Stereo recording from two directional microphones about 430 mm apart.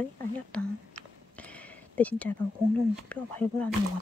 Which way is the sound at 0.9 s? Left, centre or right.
Centre.